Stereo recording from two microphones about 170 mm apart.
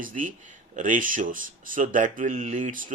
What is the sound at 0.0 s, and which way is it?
Speech, 50° right (ahead or behind).